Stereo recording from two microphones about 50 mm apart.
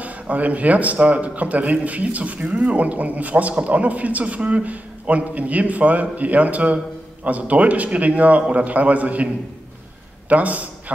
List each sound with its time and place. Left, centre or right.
0.0 s a man's voice: right